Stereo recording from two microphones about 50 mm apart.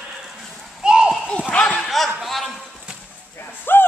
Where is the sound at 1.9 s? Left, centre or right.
Centre.